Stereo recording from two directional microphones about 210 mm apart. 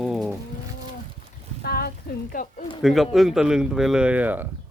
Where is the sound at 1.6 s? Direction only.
45° left (ahead or behind).